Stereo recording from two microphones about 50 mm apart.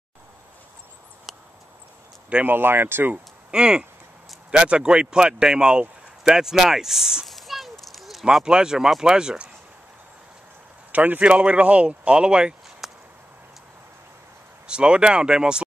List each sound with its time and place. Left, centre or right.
1.3 s a sound: centre
2.2 s speech: right
2.5 s speech: right
3.5 s speech: centre
7.2 s a sound: centre
8.5 s speech: centre
10.9 s speech: right
12.8 s a sound: centre
14.7 s speech: centre